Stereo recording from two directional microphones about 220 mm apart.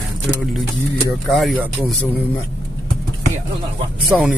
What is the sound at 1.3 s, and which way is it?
Speech, centre (ahead or behind).